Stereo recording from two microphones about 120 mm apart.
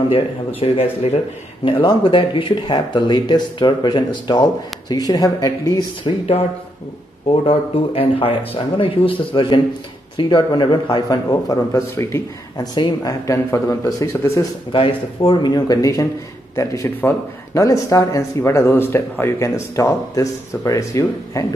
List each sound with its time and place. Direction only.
0.1 s speech: 50° left (ahead or behind); by 6.1 s 35° left (ahead or behind)
7.4 s speech: 55° left (ahead or behind); by 12.6 s 25° left (ahead or behind)
12.7 s speech: 40° left (ahead or behind)
13.3 s speech: 25° left (ahead or behind)
14.7 s speech: 45° left (ahead or behind); by 21.5 s 25° left (ahead or behind)